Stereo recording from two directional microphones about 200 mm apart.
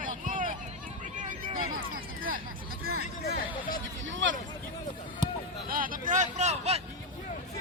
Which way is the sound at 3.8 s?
70° right (ahead or behind).